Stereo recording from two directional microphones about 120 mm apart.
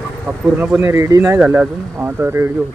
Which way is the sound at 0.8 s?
25° right (ahead or behind).